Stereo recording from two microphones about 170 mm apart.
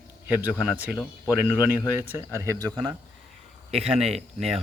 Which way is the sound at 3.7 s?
35° right (ahead or behind).